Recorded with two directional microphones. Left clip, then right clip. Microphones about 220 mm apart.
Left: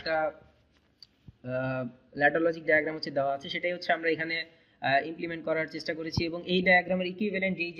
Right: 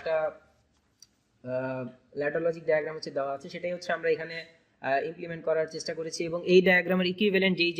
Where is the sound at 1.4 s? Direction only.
40° right (ahead or behind).